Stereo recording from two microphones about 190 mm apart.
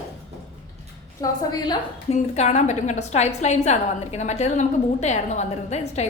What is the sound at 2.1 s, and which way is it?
A woman's voice, 35° left (ahead or behind).